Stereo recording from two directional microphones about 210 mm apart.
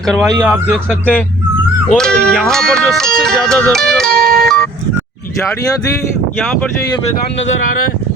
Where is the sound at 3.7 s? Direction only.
Centre (ahead or behind).